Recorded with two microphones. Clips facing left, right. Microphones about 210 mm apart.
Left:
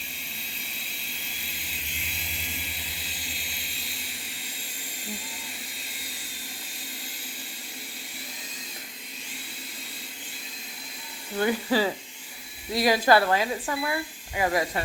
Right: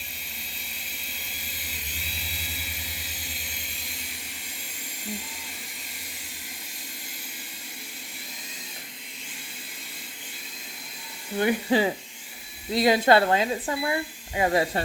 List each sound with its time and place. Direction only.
11.3 s speech: 20° right (ahead or behind)